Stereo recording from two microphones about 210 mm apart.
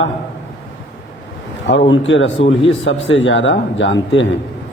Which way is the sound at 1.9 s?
60° left (ahead or behind).